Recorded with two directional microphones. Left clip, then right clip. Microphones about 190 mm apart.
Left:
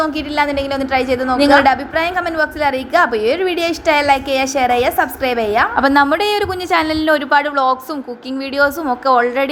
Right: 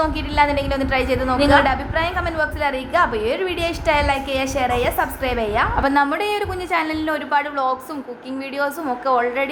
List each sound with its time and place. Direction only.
0.0 s a woman's voice: 20° left (ahead or behind)